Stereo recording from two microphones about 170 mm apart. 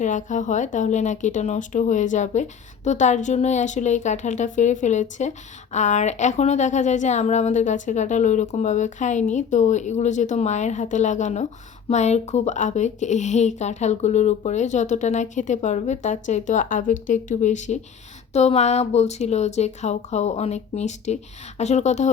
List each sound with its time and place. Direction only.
0.0 s speech: 45° left (ahead or behind)